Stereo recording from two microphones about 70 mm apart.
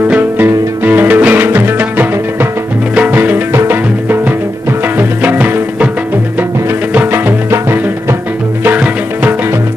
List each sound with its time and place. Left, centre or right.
0.1 s music: right
7.5 s music: right
8.6 s music: right